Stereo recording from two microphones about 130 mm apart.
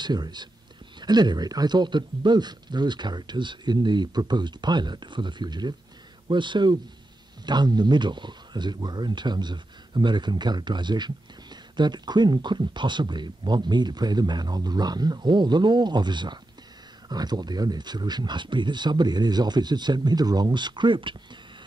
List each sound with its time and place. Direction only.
0.0 s speech: 35° right (ahead or behind)